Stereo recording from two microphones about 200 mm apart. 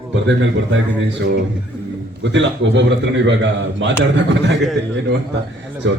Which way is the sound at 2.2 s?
65° right (ahead or behind).